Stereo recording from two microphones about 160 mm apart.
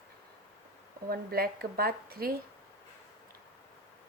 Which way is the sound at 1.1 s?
70° right (ahead or behind).